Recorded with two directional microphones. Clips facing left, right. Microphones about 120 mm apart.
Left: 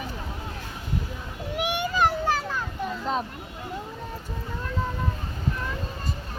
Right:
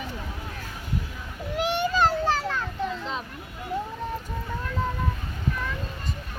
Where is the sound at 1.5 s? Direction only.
15° left (ahead or behind).